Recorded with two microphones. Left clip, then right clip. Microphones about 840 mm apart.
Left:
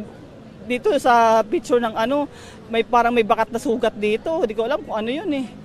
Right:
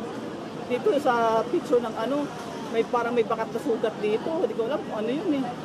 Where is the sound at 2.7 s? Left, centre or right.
Left.